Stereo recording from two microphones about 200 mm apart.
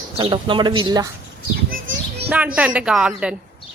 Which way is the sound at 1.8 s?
65° right (ahead or behind).